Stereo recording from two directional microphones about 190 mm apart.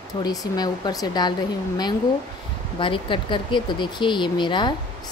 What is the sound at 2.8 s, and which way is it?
Speech, 25° left (ahead or behind).